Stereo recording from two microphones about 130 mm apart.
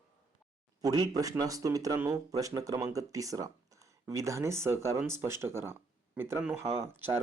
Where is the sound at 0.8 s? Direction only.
30° right (ahead or behind).